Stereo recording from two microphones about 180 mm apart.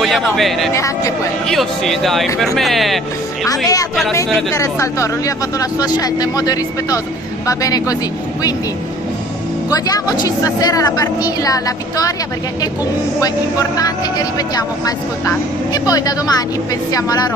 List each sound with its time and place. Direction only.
0.0 s speech: centre (ahead or behind)
0.7 s a man's voice: 15° left (ahead or behind)
1.5 s speech: centre (ahead or behind)
3.4 s speech: 20° left (ahead or behind)
9.7 s speech: 20° left (ahead or behind)
13.2 s speech: 20° left (ahead or behind)